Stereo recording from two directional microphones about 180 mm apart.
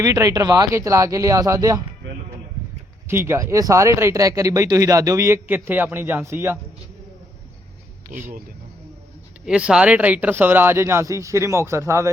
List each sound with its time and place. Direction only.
0.0 s speech: 15° right (ahead or behind)
3.1 s speech: 15° right (ahead or behind)
9.5 s speech: 5° right (ahead or behind)